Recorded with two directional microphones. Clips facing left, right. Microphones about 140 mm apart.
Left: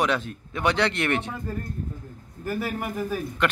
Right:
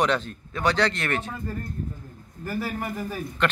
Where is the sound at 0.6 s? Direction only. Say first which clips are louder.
Even; 15° left (ahead or behind).